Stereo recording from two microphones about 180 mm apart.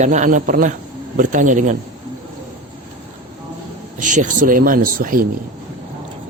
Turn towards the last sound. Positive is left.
turn(degrees=-50)  # may be behind; listen again after turning